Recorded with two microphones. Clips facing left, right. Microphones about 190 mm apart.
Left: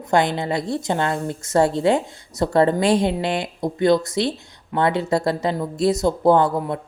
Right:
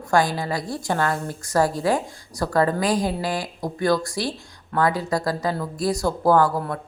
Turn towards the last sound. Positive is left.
turn(degrees=20)  # may be behind; listen again after turning